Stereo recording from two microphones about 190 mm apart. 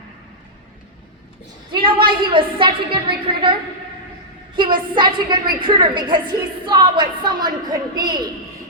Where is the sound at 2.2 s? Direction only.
25° right (ahead or behind).